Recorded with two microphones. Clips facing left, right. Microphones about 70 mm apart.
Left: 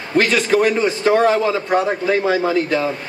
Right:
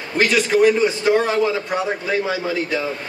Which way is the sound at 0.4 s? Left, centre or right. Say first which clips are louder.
Right 1 dB; left.